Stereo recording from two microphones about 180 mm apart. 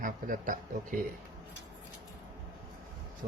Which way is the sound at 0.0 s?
50° right (ahead or behind).